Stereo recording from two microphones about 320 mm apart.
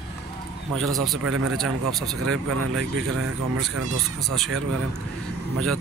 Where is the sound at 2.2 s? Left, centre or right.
Right.